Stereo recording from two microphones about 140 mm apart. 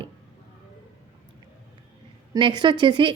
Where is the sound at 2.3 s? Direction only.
35° right (ahead or behind).